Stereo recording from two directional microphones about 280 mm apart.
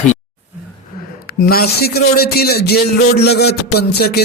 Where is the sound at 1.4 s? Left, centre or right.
Left.